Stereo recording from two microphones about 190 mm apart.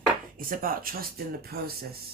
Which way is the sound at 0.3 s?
50° right (ahead or behind).